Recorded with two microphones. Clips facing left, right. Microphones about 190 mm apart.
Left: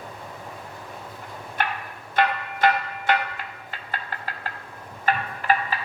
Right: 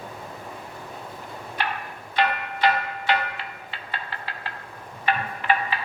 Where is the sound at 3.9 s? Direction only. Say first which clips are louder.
Left 1 dB; 45° left (ahead or behind).